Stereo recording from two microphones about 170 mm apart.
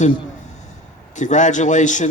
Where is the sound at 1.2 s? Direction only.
45° left (ahead or behind).